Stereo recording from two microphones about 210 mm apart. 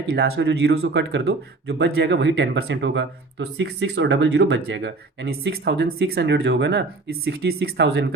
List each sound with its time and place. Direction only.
0.1 s speech: 50° right (ahead or behind)